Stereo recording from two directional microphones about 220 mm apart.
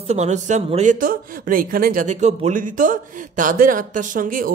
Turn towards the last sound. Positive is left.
turn(degrees=-40)  # may be behind; listen again after turning